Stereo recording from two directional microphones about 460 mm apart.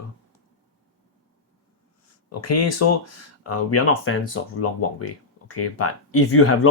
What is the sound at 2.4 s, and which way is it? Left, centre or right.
Speech, left.